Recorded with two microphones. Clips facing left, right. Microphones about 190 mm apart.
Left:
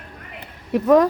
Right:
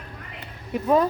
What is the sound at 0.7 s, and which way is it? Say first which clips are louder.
Speech: left 6 dB; 80° left.